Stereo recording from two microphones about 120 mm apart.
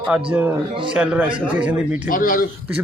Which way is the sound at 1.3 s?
45° right (ahead or behind).